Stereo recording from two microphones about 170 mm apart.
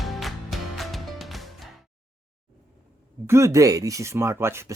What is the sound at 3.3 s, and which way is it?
Speech, 15° right (ahead or behind).